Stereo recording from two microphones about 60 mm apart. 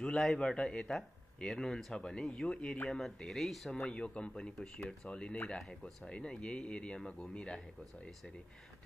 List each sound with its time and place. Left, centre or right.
0.0 s a man's voice: centre
3.8 s a man's voice: centre